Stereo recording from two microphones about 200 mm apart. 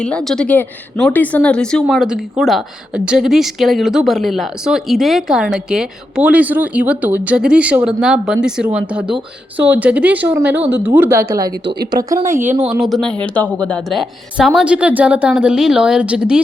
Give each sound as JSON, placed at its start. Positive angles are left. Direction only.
{"t": 0.0, "sound": "speech", "side_deg": 5}
{"t": 12.3, "sound": "speech", "side_deg": -40}
{"t": 12.8, "sound": "speech", "side_deg": 0}